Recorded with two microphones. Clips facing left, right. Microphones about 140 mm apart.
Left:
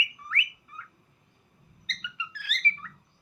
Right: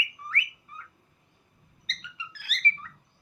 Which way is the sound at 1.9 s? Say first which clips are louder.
Left 3 dB; 35° right (ahead or behind).